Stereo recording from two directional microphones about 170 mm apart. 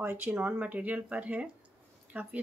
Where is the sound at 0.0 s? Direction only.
15° right (ahead or behind).